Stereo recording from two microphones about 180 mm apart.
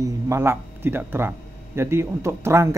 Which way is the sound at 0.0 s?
15° right (ahead or behind).